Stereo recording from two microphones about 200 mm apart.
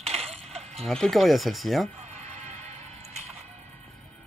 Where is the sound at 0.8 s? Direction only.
Centre (ahead or behind).